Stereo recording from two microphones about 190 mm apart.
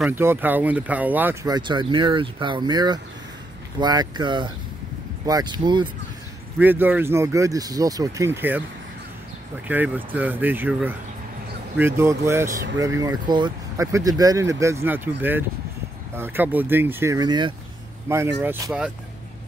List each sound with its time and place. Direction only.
0.0 s speech: 10° right (ahead or behind)
6.6 s speech: 10° right (ahead or behind)
9.7 s speech: 10° right (ahead or behind)